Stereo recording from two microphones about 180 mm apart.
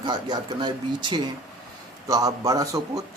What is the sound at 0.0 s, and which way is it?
Speech, 25° right (ahead or behind).